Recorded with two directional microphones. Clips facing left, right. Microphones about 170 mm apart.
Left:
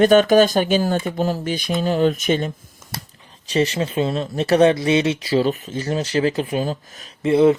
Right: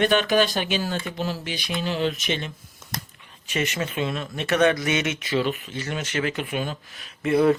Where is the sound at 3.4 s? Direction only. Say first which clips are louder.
Left 7 dB; 35° left (ahead or behind).